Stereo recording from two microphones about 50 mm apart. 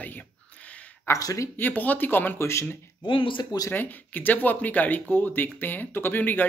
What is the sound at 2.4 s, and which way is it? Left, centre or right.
Speech, left.